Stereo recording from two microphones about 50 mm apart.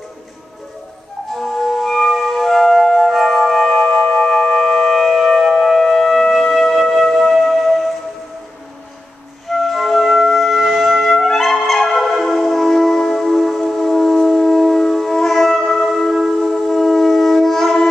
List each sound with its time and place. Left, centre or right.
1.3 s music: centre
4.3 s music: centre
9.5 s music: centre